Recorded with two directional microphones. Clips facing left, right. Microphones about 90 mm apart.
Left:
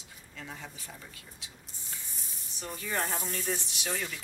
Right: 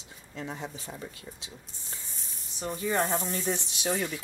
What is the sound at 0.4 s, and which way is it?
Speech, 30° right (ahead or behind).